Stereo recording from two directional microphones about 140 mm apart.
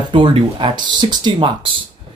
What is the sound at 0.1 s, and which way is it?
Speech, 35° right (ahead or behind).